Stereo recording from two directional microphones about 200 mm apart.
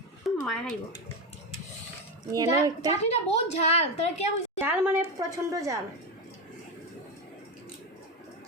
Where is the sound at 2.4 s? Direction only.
20° right (ahead or behind).